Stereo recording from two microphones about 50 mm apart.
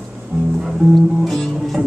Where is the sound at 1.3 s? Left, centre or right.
Centre.